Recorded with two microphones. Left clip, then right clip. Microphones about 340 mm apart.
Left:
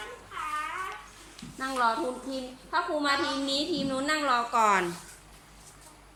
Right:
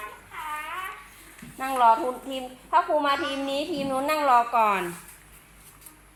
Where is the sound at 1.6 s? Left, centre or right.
Centre.